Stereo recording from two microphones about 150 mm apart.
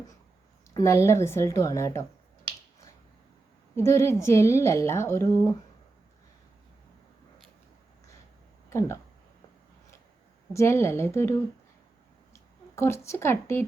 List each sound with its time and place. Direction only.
0.7 s a woman's voice: 20° left (ahead or behind)
3.8 s a woman's voice: 20° left (ahead or behind)
8.7 s a woman's voice: 20° left (ahead or behind)
10.5 s speech: 20° left (ahead or behind)